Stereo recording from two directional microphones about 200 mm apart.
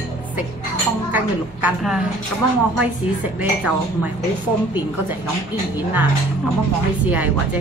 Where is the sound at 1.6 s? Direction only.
Centre (ahead or behind).